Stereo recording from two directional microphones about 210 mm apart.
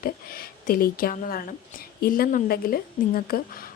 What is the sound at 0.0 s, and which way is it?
A woman's voice, 45° left (ahead or behind).